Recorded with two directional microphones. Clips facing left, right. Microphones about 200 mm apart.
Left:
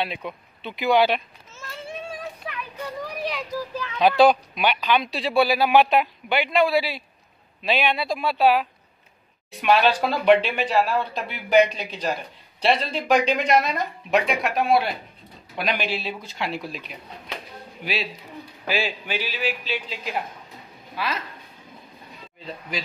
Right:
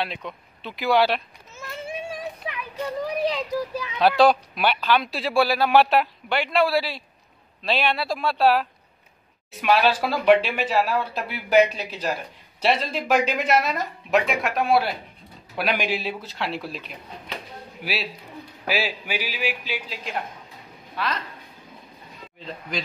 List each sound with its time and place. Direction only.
0.0 s speech: centre (ahead or behind)
1.6 s child singing: 15° right (ahead or behind)
2.4 s a sound: 15° right (ahead or behind)
2.8 s speech: 25° right (ahead or behind)
4.2 s speech: centre (ahead or behind)
20.9 s speech: 5° left (ahead or behind)